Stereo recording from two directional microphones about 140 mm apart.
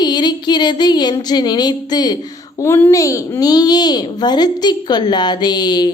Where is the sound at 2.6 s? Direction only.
15° left (ahead or behind).